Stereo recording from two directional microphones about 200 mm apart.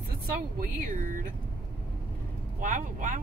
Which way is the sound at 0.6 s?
40° right (ahead or behind).